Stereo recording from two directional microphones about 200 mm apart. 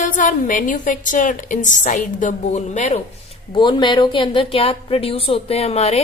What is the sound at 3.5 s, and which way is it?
A woman's voice, 20° left (ahead or behind).